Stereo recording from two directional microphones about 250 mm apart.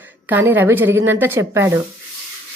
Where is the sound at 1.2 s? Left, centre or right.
Centre.